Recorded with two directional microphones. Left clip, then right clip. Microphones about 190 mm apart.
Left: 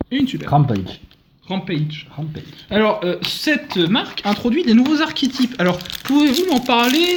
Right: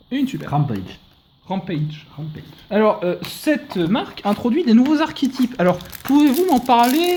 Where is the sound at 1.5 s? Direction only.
60° right (ahead or behind).